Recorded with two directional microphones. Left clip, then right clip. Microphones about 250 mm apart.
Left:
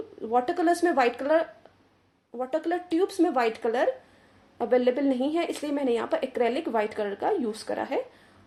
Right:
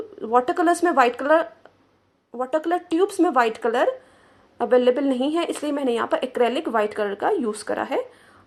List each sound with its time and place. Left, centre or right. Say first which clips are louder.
0.2 s speech: right 5 dB; centre